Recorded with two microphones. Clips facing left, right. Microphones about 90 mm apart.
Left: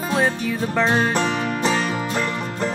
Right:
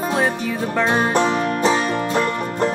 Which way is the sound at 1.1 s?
5° right (ahead or behind).